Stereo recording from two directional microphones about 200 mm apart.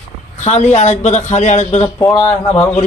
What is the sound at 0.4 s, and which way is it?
A man's voice, 35° left (ahead or behind).